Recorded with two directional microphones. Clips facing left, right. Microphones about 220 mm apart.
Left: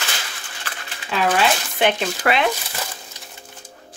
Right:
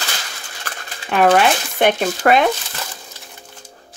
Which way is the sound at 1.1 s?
55° right (ahead or behind).